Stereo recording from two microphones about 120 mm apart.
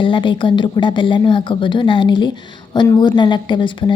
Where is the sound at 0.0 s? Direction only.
40° left (ahead or behind).